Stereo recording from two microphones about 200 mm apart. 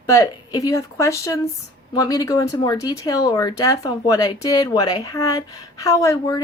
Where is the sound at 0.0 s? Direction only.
15° left (ahead or behind).